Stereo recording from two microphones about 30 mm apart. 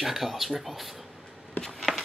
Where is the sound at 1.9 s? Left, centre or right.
Centre.